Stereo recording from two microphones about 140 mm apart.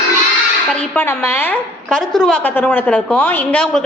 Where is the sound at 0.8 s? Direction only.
15° left (ahead or behind).